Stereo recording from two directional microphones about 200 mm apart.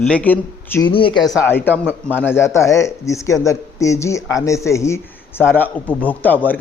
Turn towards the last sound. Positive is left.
turn(degrees=10)  # may be behind; listen again after turning